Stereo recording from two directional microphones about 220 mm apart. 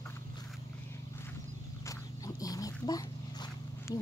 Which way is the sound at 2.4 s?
15° left (ahead or behind).